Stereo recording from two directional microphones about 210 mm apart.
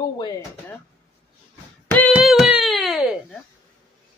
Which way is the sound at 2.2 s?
5° right (ahead or behind).